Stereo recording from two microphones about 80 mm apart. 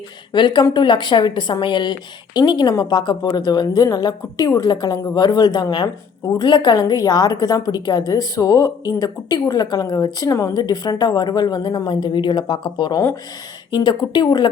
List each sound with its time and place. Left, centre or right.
0.3 s a woman's voice: left
3.8 s a woman's voice: left
4.7 s a woman's voice: left
10.5 s a woman's voice: left
13.7 s a woman's voice: left